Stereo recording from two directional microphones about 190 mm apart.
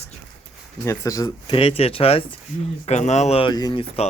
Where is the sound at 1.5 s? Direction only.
30° left (ahead or behind).